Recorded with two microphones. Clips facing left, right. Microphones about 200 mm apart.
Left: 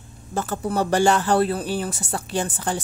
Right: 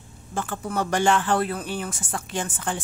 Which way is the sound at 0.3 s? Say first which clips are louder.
Left 4 dB; 40° left (ahead or behind).